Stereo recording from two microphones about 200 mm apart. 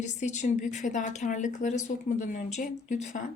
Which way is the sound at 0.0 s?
35° left (ahead or behind).